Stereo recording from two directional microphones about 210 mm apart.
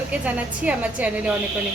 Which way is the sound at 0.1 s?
5° right (ahead or behind).